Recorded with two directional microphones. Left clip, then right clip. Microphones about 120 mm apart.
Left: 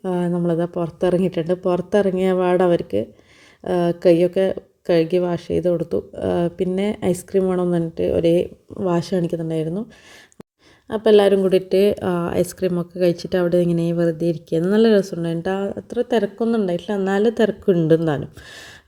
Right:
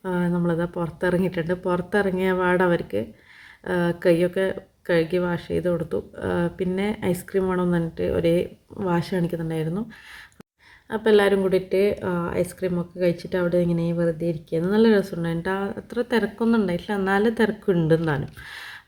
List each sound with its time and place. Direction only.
0.0 s speech: 30° left (ahead or behind)
10.8 s speech: 30° left (ahead or behind)
11.7 s speech: 45° left (ahead or behind)
15.1 s speech: 25° left (ahead or behind)